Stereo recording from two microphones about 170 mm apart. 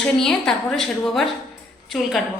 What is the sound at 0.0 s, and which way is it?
A woman's voice, 5° left (ahead or behind).